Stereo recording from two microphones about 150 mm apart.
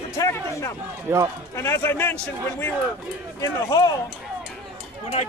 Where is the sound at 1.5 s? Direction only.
15° left (ahead or behind).